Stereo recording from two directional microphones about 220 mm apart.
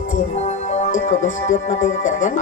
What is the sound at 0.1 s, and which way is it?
A man's voice, 30° left (ahead or behind).